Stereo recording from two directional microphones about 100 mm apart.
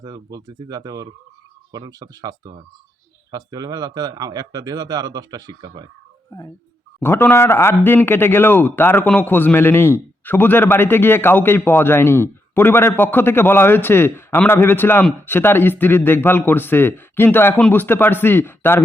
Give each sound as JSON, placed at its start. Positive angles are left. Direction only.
{"t": 0.0, "sound": "speech", "side_deg": -40}
{"t": 7.0, "sound": "a man's voice", "side_deg": 20}